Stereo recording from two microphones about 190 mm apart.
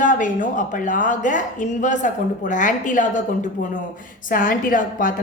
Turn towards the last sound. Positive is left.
turn(degrees=45)  # may be behind; listen again after turning